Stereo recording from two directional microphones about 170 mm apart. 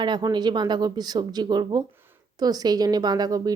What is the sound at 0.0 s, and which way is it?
Speech, 25° right (ahead or behind).